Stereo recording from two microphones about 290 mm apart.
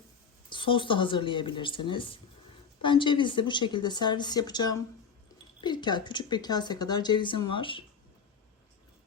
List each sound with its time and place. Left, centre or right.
0.5 s speech: centre